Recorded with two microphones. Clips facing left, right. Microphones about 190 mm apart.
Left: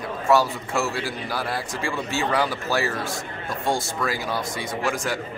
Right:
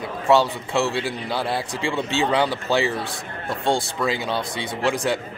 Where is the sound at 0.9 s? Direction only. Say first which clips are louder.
Right 3 dB; 25° right (ahead or behind).